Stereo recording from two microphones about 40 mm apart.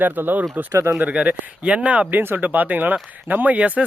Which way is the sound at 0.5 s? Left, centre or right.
Right.